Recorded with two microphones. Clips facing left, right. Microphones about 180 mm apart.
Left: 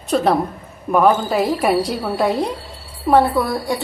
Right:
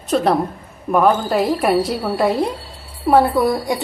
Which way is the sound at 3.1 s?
10° right (ahead or behind).